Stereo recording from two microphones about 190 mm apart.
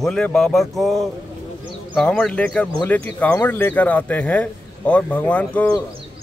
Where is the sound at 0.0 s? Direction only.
5° left (ahead or behind).